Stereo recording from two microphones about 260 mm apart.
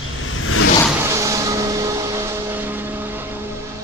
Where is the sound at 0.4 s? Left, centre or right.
Left.